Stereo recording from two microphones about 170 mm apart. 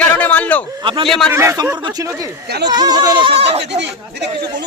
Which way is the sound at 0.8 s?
30° right (ahead or behind).